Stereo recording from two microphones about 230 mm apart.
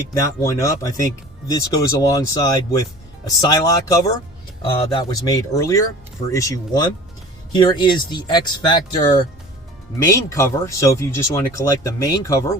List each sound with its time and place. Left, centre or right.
0.6 s speech: centre